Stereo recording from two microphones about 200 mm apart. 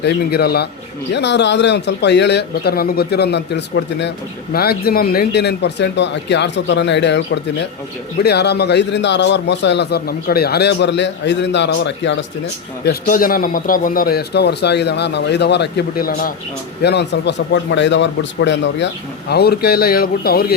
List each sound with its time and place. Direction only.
0.0 s a man's voice: 55° left (ahead or behind)
12.8 s a man's voice: 45° left (ahead or behind)
16.8 s a man's voice: 55° left (ahead or behind)
19.3 s a man's voice: 50° left (ahead or behind)